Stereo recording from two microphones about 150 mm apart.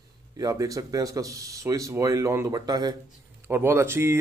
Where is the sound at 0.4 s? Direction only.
25° right (ahead or behind).